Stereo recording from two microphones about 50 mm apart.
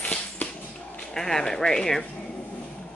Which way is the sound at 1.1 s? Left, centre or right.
Centre.